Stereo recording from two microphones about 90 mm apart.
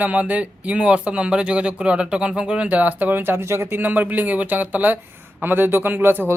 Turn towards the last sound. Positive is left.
turn(degrees=-25)  # may be behind; listen again after turning